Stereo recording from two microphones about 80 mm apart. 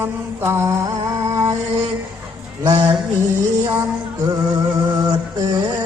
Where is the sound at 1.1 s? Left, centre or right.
Right.